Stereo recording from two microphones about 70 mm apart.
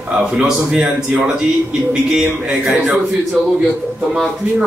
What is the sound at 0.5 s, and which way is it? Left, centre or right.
Speech, centre.